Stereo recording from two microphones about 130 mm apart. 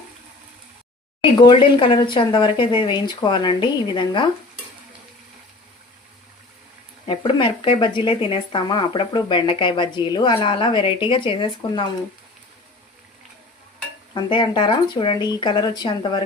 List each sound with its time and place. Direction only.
1.2 s speech: 40° left (ahead or behind)
7.0 s speech: 40° left (ahead or behind)
14.1 s speech: 35° left (ahead or behind)